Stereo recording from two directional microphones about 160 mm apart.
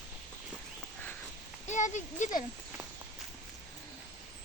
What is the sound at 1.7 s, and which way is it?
Speech, 50° left (ahead or behind).